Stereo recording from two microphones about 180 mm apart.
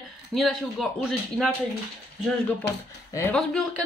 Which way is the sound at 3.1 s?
15° left (ahead or behind).